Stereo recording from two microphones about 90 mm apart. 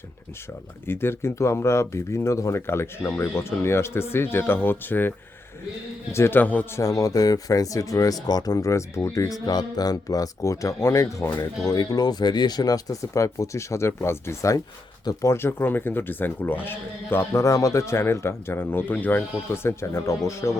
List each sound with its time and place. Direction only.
0.9 s speech: 25° left (ahead or behind)
6.7 s speech: 40° left (ahead or behind)
9.5 s speech: 45° left (ahead or behind); by 19.2 s 20° left (ahead or behind)
19.6 s speech: 30° left (ahead or behind)